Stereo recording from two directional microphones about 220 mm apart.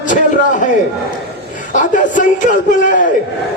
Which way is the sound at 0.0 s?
35° left (ahead or behind).